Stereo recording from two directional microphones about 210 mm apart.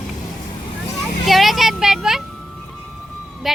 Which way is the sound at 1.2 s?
Centre (ahead or behind).